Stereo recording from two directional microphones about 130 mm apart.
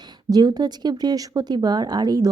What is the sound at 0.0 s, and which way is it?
Speech, 30° right (ahead or behind).